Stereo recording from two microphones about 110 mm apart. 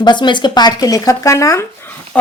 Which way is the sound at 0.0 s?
45° left (ahead or behind).